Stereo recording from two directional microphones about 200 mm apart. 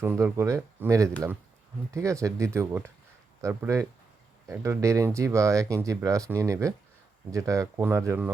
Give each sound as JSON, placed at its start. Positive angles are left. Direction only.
{"t": 0.0, "sound": "speech", "side_deg": -10}